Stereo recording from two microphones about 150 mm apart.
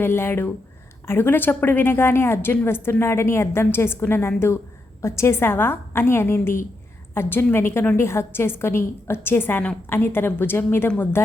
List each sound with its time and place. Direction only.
0.0 s a woman's voice: 15° left (ahead or behind)